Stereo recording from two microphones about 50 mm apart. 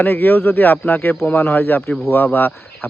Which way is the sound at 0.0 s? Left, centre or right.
Left.